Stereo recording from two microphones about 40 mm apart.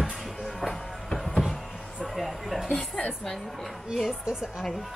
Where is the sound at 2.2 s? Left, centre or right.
Centre.